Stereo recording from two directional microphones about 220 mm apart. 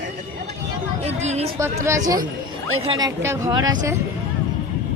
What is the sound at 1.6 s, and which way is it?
A woman's voice, 15° right (ahead or behind).